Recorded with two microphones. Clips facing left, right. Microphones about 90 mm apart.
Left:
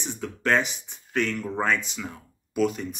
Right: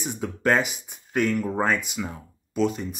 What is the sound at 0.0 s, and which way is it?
Speech, 10° right (ahead or behind).